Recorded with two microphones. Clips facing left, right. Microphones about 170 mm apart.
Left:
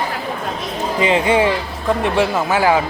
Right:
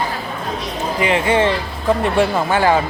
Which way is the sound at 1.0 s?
20° left (ahead or behind).